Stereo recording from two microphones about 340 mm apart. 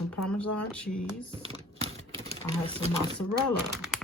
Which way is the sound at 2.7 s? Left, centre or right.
Centre.